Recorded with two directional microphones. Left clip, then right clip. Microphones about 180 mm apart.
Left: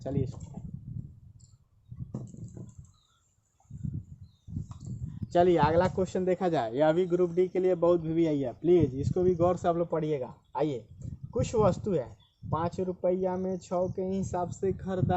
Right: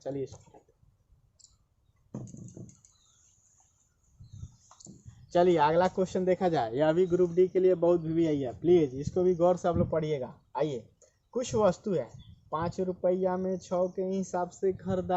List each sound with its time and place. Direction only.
0.0 s speech: 25° left (ahead or behind)
5.3 s speech: 25° left (ahead or behind)